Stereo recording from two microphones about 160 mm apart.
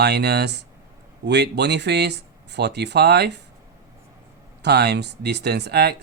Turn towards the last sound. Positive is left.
turn(degrees=-90)